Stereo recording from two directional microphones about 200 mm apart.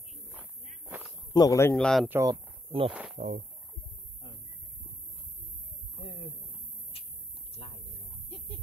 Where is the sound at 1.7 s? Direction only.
Centre (ahead or behind).